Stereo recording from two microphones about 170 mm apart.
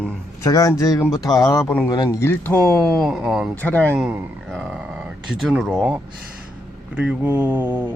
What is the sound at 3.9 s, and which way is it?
A man's voice, 5° right (ahead or behind).